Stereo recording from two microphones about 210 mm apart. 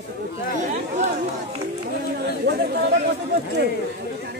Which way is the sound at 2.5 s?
55° right (ahead or behind).